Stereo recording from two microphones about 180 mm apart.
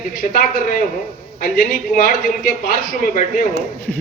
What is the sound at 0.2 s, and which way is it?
Speech, 50° left (ahead or behind).